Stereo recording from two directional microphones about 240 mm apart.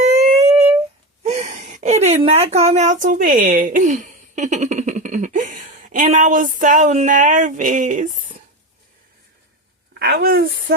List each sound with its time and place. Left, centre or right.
0.0 s a sound: right
1.2 s speech: right
10.0 s a woman's voice: right